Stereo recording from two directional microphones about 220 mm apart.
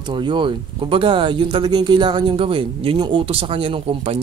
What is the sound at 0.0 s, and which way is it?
Speech, 20° right (ahead or behind).